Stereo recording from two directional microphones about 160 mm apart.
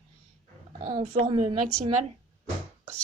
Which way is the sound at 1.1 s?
35° right (ahead or behind).